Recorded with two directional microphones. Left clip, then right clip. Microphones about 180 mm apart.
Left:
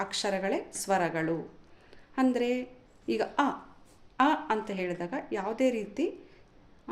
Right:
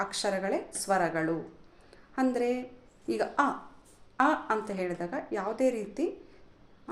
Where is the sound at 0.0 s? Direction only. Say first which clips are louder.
Even; 25° left (ahead or behind).